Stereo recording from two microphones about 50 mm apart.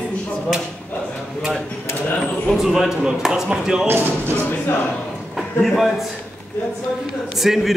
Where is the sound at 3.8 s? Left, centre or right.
Right.